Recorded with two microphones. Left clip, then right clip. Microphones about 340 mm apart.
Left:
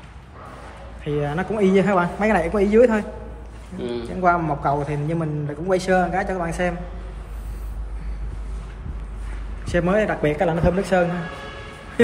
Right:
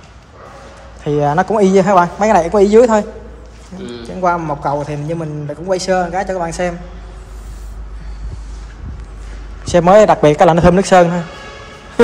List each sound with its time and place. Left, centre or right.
1.0 s a man's voice: centre
4.2 s a man's voice: centre
9.7 s a man's voice: centre